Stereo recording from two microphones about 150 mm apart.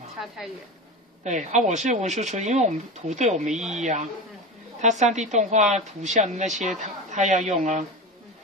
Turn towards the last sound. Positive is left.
turn(degrees=-55)  # may be behind; listen again after turning